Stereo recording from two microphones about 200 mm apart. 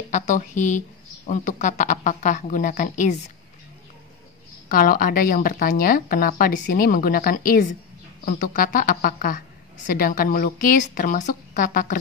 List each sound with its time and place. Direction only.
0.1 s speech: 35° left (ahead or behind)
4.6 s speech: 45° left (ahead or behind)